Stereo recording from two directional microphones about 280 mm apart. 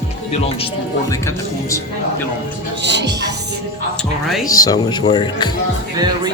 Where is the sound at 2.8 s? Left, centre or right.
Right.